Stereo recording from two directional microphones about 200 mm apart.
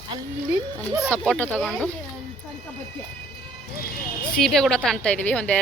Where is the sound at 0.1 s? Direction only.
20° right (ahead or behind).